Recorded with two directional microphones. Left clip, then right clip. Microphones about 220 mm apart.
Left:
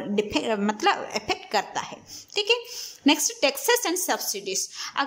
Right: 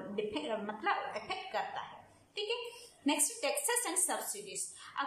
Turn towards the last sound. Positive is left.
turn(degrees=45)  # may be behind; listen again after turning